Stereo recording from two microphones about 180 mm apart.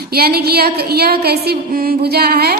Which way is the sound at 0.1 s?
60° right (ahead or behind).